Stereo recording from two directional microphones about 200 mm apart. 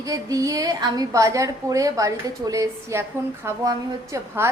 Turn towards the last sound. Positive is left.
turn(degrees=-15)  # may be behind; listen again after turning